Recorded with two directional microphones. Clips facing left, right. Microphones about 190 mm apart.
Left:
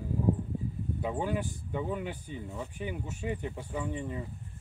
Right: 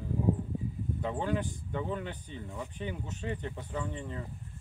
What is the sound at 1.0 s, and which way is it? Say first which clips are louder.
Speech: even; 10° left (ahead or behind).